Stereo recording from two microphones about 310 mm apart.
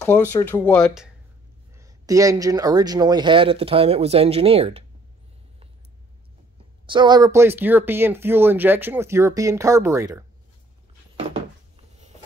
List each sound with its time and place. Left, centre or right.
0.0 s speech: centre
1.8 s speech: centre
6.9 s speech: centre